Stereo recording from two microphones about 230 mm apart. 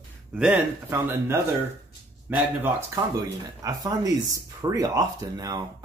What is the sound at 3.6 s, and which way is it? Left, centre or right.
Speech, centre.